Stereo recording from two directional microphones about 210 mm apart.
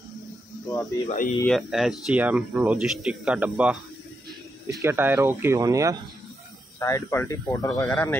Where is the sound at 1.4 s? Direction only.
Centre (ahead or behind).